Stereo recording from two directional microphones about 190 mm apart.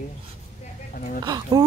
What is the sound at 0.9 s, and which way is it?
Speech, 45° left (ahead or behind).